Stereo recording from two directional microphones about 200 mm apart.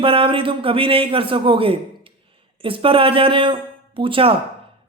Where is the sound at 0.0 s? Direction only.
25° right (ahead or behind).